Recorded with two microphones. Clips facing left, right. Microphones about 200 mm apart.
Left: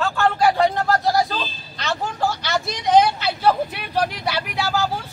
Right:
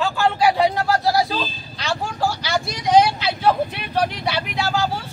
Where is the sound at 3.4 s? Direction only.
10° left (ahead or behind).